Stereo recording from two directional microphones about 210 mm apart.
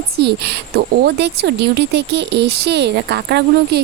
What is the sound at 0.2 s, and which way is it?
Speech, 50° right (ahead or behind).